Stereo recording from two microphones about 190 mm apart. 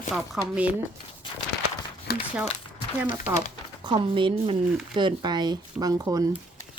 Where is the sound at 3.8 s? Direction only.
25° right (ahead or behind).